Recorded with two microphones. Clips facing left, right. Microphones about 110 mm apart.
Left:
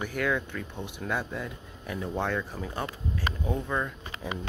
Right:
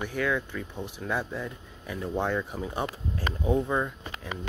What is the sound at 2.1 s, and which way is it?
Speech, 10° right (ahead or behind).